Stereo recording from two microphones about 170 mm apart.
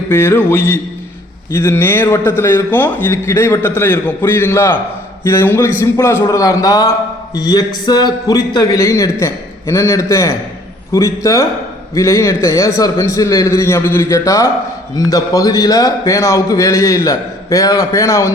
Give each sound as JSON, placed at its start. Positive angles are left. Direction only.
{"t": 0.1, "sound": "a man's voice", "side_deg": 15}